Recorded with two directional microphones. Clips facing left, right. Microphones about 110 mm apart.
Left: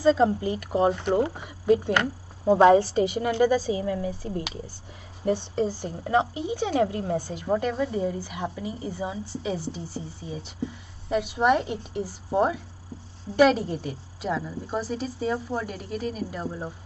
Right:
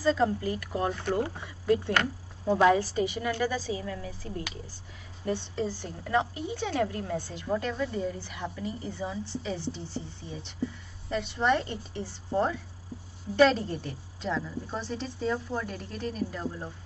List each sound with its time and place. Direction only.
0.0 s speech: 20° left (ahead or behind)
2.6 s speech: 30° left (ahead or behind)
3.8 s a woman's voice: 30° left (ahead or behind)